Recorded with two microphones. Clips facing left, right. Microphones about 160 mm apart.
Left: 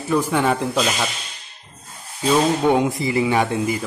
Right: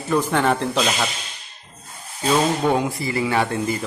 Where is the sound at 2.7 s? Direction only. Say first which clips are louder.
Left 3 dB; 20° left (ahead or behind).